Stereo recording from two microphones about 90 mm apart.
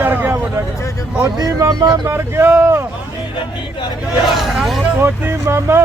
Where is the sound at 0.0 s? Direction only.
20° right (ahead or behind).